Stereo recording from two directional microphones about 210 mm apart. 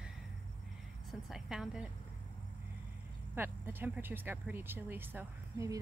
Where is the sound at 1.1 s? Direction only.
Centre (ahead or behind).